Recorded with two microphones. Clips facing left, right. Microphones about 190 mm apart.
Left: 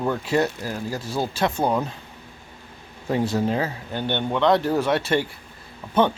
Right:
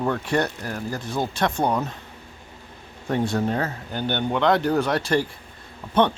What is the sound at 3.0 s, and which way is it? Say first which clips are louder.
Speech: left 1 dB; 5° left (ahead or behind).